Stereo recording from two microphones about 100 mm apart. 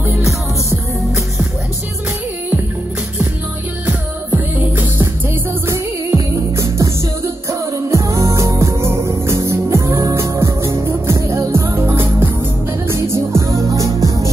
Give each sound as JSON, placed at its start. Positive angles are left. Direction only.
{"t": 0.0, "sound": "music", "side_deg": -25}
{"t": 3.8, "sound": "music", "side_deg": -15}